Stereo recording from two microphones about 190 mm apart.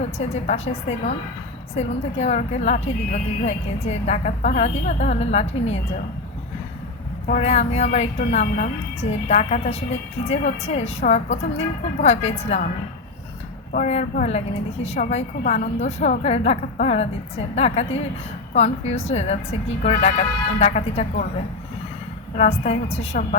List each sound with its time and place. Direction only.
0.2 s speech: 35° left (ahead or behind)
7.3 s speech: 40° left (ahead or behind)
13.7 s speech: 40° left (ahead or behind)
22.4 s speech: 35° left (ahead or behind)